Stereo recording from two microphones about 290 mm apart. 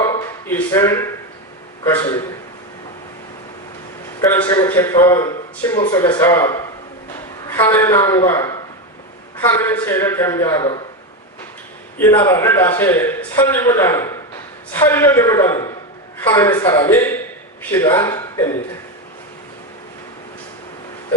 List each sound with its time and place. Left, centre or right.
0.0 s a sound: centre
1.8 s a man's voice: centre
4.3 s a man's voice: centre
11.9 s a man's voice: centre